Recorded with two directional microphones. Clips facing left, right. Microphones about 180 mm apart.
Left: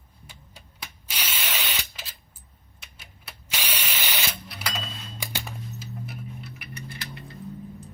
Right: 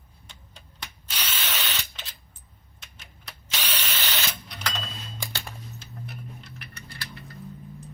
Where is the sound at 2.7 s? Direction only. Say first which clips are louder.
Even; 10° left (ahead or behind).